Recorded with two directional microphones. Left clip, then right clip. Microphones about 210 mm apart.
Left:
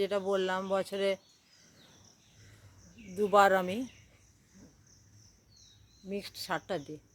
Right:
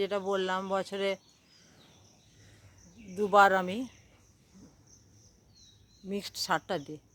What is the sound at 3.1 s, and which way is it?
Speech, 5° right (ahead or behind).